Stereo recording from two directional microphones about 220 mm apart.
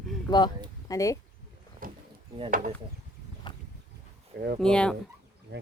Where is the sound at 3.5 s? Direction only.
20° left (ahead or behind).